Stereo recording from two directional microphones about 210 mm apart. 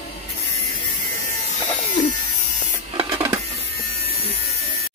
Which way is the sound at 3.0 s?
20° right (ahead or behind).